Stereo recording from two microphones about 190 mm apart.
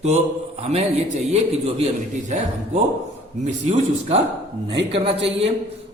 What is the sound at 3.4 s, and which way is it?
A man's voice, 40° right (ahead or behind).